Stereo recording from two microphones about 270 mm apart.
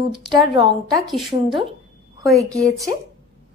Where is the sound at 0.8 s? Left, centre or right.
Centre.